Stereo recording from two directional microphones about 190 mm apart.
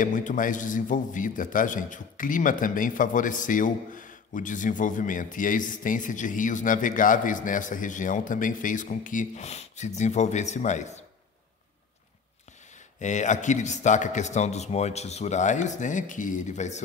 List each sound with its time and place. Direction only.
0.0 s a man's voice: 40° left (ahead or behind)
12.7 s a man's voice: 40° left (ahead or behind)